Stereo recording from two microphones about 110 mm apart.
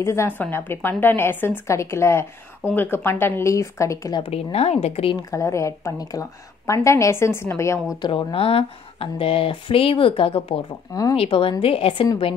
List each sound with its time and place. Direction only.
0.0 s a woman's voice: 25° left (ahead or behind)
4.2 s speech: 65° left (ahead or behind)
5.1 s a woman's voice: 30° left (ahead or behind)
8.0 s speech: 50° left (ahead or behind)
10.9 s speech: 35° left (ahead or behind)
11.1 s speech: 55° left (ahead or behind)